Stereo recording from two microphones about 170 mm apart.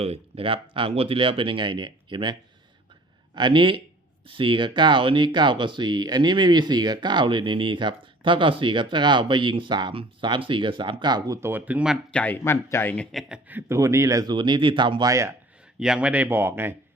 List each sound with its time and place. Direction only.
0.0 s speech: 35° right (ahead or behind)
3.3 s speech: 30° right (ahead or behind)
11.3 s a man's voice: 10° right (ahead or behind)
12.1 s a man's voice: 10° left (ahead or behind); by 15.4 s 20° right (ahead or behind)
15.8 s a man's voice: 5° right (ahead or behind)